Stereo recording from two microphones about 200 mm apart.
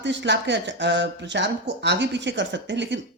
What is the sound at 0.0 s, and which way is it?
Speech, 60° right (ahead or behind).